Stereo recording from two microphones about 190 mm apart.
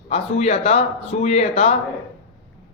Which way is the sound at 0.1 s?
35° left (ahead or behind).